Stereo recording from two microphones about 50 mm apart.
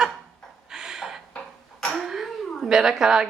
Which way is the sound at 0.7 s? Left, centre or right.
Centre.